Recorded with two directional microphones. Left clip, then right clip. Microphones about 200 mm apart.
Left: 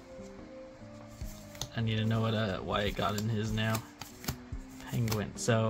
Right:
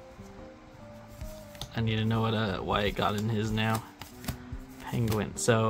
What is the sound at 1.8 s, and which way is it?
Speech, 20° right (ahead or behind).